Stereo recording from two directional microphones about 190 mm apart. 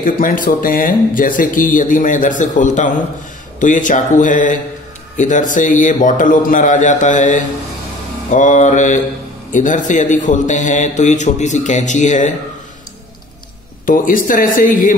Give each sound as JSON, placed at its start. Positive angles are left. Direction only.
{"t": 0.0, "sound": "speech", "side_deg": 45}
{"t": 13.8, "sound": "speech", "side_deg": 45}